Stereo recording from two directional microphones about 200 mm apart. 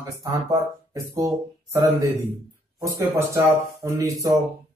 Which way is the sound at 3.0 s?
15° right (ahead or behind).